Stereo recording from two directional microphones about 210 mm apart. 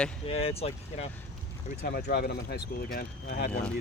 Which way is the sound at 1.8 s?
50° left (ahead or behind).